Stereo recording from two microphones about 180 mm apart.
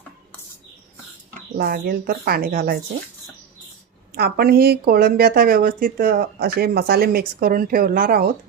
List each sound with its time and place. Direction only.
1.3 s speech: 60° right (ahead or behind)
4.1 s speech: 60° right (ahead or behind)